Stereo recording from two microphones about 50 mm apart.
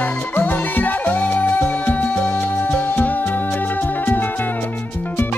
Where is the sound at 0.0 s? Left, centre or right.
Left.